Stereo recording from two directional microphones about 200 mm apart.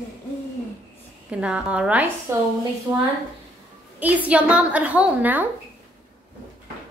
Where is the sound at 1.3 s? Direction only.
5° right (ahead or behind).